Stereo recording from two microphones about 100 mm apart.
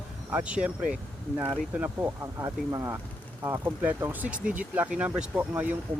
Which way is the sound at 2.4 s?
30° right (ahead or behind).